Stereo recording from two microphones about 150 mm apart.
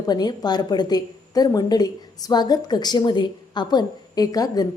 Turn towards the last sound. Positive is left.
turn(degrees=25)  # may be behind; listen again after turning